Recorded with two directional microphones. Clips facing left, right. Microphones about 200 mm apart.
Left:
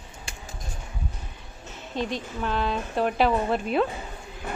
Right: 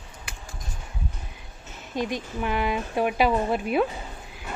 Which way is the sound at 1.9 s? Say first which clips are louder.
Right 1 dB; 15° right (ahead or behind).